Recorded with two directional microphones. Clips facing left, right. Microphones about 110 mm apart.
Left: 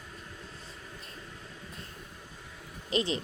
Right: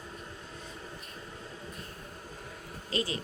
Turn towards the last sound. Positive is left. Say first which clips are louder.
# left 3 dB
turn(degrees=25)  # may be behind; listen again after turning